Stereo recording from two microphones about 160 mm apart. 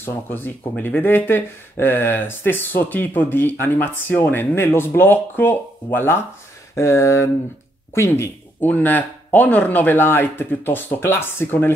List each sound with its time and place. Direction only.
0.0 s speech: 10° left (ahead or behind)